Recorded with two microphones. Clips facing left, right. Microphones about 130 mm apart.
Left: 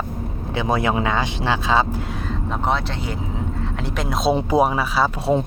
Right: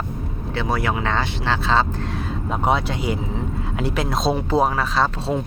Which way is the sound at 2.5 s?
10° right (ahead or behind).